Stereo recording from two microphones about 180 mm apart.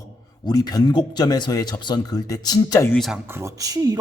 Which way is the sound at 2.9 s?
Centre (ahead or behind).